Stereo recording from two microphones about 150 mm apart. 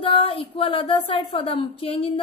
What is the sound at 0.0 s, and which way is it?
A woman's voice, 35° left (ahead or behind).